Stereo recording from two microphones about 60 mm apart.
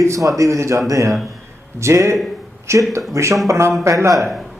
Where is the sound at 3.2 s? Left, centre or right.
Right.